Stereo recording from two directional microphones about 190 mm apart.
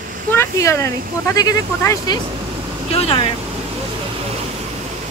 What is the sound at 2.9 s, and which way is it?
Speech, 30° left (ahead or behind).